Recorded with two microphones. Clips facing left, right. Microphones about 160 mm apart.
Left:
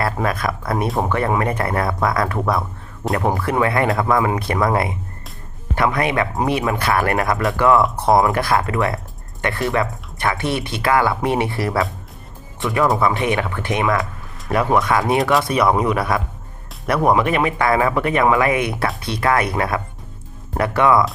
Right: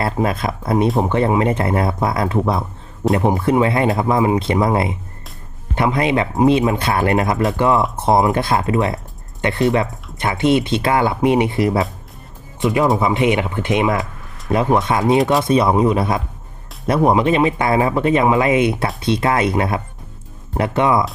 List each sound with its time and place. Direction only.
0.0 s speech: 25° right (ahead or behind)